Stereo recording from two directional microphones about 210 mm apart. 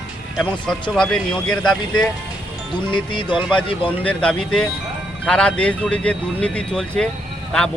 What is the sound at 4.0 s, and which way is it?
A man's voice, 5° left (ahead or behind).